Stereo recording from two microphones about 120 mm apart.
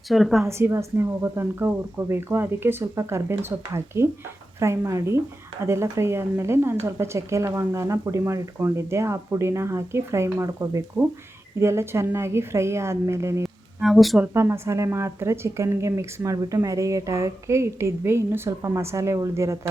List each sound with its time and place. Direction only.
0.1 s a woman's voice: centre (ahead or behind)
0.4 s a woman's voice: 25° right (ahead or behind)
13.8 s a woman's voice: centre (ahead or behind)
14.2 s a woman's voice: 20° right (ahead or behind)